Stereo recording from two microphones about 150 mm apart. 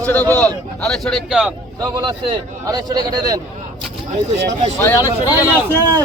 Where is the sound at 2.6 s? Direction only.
25° right (ahead or behind).